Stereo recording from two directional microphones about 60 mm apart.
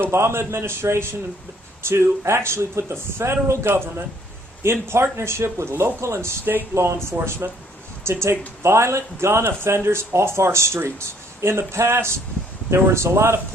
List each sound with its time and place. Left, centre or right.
0.0 s speech: right